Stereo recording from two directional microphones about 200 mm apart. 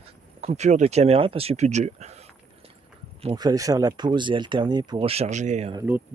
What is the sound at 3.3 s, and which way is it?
Speech, 20° right (ahead or behind).